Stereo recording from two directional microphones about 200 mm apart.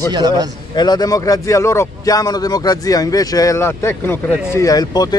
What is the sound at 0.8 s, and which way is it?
A man's voice, 20° left (ahead or behind).